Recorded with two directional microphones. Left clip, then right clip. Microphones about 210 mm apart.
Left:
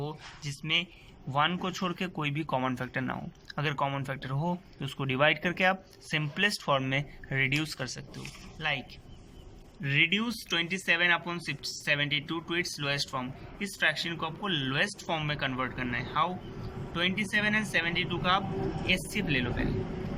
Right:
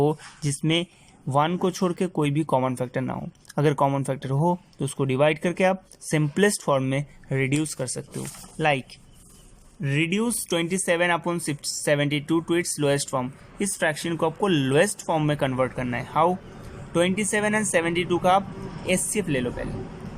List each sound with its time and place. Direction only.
0.0 s speech: 40° right (ahead or behind)